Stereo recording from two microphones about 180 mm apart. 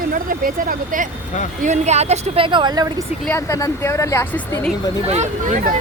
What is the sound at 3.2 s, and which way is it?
Speech, 15° left (ahead or behind).